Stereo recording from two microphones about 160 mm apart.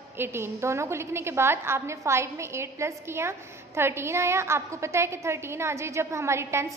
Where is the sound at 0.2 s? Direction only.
15° right (ahead or behind).